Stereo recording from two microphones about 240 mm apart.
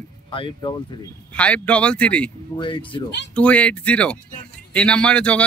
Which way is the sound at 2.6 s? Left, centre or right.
Left.